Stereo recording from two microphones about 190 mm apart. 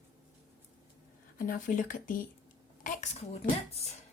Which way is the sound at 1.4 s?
45° left (ahead or behind).